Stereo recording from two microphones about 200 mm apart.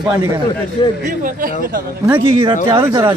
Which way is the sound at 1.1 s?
45° right (ahead or behind).